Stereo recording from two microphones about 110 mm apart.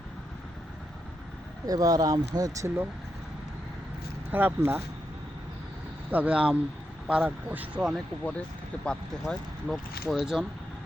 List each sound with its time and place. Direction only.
1.6 s speech: 35° right (ahead or behind)
4.3 s speech: 20° right (ahead or behind)
6.1 s speech: 15° right (ahead or behind)
8.2 s speech: 10° left (ahead or behind)